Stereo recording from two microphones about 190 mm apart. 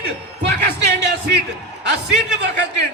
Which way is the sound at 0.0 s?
60° right (ahead or behind).